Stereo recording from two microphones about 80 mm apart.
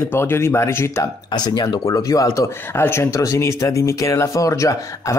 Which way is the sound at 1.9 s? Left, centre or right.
Left.